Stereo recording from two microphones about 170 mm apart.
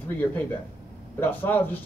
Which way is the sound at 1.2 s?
10° left (ahead or behind).